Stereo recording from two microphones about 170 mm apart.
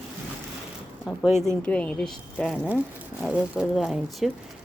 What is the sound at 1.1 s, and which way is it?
Speech, 5° right (ahead or behind).